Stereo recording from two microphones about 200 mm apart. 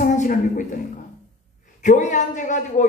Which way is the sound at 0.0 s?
40° left (ahead or behind).